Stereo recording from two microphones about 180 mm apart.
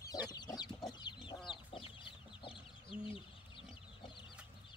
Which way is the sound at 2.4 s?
30° left (ahead or behind).